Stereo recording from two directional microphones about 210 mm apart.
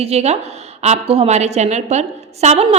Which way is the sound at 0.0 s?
30° right (ahead or behind).